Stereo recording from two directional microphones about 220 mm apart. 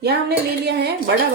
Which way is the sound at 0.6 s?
50° right (ahead or behind).